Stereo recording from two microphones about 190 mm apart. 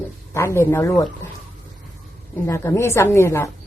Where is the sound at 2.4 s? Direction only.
15° left (ahead or behind).